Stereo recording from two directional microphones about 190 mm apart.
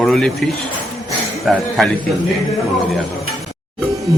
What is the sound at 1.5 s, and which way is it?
Speech, centre (ahead or behind).